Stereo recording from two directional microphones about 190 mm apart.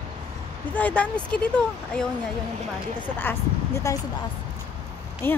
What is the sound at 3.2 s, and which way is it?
Speech, 15° left (ahead or behind).